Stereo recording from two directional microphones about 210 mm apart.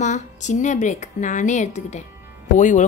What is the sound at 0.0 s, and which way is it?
Speech, 35° left (ahead or behind).